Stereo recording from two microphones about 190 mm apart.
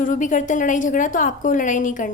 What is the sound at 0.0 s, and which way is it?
A woman's voice, 45° left (ahead or behind).